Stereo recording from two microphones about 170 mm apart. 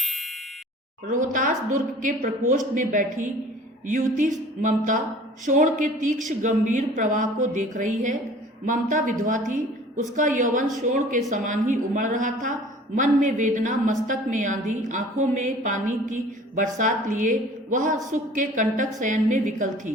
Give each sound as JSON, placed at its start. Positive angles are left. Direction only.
{"t": 0.0, "sound": "clang", "side_deg": 0}
{"t": 1.1, "sound": "a woman's voice", "side_deg": -50}